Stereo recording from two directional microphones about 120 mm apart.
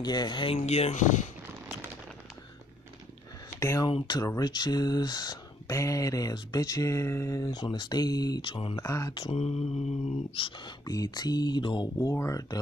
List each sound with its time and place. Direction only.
0.0 s speech: 35° left (ahead or behind)
0.6 s a sound: 65° left (ahead or behind)
3.5 s speech: 25° left (ahead or behind)
3.8 s speech: 35° left (ahead or behind)
7.6 s speech: 40° left (ahead or behind)
8.8 s speech: 25° left (ahead or behind)
9.3 s a sound: 65° left (ahead or behind)
10.9 s speech: 35° left (ahead or behind)
12.1 s speech: 25° left (ahead or behind)